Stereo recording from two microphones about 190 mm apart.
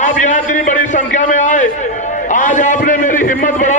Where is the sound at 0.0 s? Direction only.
45° left (ahead or behind).